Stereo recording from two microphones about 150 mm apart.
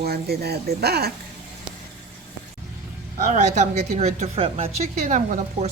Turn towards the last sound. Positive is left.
turn(degrees=-55)  # may be behind; listen again after turning